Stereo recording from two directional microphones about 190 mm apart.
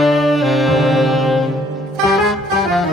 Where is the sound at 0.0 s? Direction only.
Centre (ahead or behind).